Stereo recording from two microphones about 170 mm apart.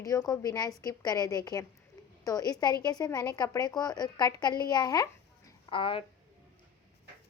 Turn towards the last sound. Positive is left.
turn(degrees=30)  # may be behind; listen again after turning